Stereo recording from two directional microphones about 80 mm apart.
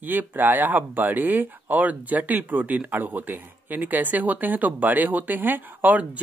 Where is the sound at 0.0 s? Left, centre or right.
Right.